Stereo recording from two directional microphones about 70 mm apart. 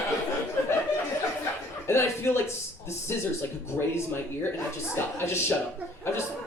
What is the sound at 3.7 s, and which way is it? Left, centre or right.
A man's voice, left.